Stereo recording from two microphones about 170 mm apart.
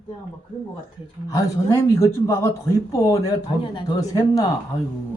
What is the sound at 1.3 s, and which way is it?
Speech, 20° left (ahead or behind).